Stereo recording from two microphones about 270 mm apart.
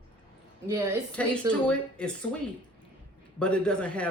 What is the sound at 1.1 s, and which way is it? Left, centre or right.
Speech, centre.